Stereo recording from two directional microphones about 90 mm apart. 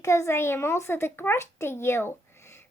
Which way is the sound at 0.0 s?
35° left (ahead or behind).